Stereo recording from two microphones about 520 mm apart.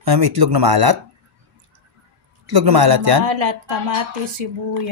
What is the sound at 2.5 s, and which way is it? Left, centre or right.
Speech, right.